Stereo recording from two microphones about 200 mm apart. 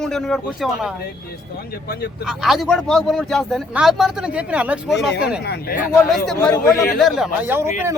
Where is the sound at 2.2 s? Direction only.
Centre (ahead or behind).